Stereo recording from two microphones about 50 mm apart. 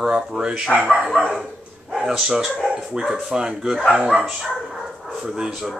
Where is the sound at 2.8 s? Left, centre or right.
Centre.